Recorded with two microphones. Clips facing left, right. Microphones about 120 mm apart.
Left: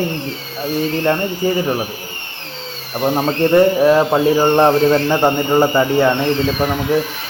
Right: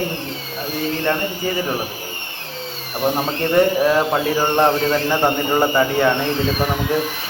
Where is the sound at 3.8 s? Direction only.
15° left (ahead or behind).